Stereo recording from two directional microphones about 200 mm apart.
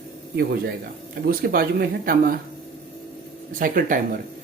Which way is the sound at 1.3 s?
50° right (ahead or behind).